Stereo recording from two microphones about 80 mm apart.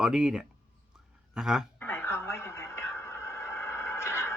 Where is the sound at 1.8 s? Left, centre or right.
Left.